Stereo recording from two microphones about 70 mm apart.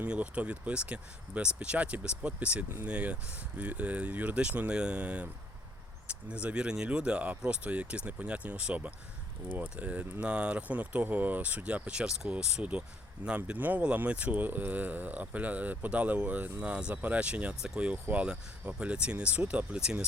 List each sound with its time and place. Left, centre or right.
0.0 s speech: centre
6.3 s speech: centre
17.9 s speech: right